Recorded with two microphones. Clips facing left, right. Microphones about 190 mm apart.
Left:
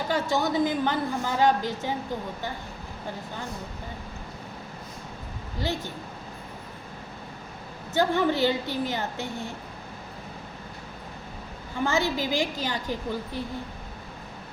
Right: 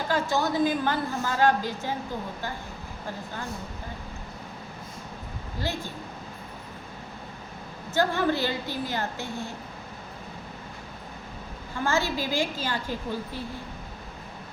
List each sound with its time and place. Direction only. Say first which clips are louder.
0.1 s a woman's voice: even; 20° left (ahead or behind)
7.9 s a woman's voice: left 1 dB; 20° left (ahead or behind)
11.9 s a woman's voice: even; 20° left (ahead or behind)